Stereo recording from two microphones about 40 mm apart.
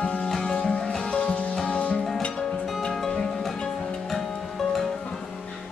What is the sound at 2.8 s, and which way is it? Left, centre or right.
Music, centre.